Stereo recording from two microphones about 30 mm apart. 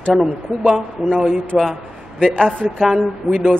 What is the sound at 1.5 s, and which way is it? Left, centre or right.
Speech, centre.